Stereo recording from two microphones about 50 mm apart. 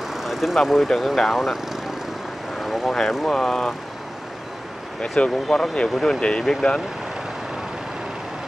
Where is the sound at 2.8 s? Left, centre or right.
Centre.